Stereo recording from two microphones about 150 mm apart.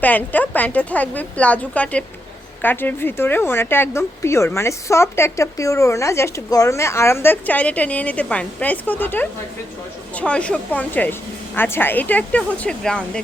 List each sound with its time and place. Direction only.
0.0 s speech: 10° left (ahead or behind)